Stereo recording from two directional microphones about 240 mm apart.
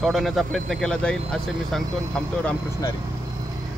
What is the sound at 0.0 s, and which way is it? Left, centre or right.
Speech, centre.